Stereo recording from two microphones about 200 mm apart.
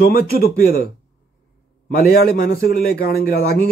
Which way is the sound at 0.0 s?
50° left (ahead or behind).